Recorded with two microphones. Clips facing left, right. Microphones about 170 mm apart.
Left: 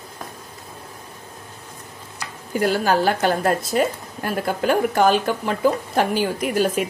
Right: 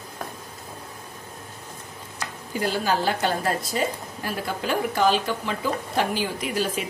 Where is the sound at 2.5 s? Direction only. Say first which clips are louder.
Left 5 dB; 55° left (ahead or behind).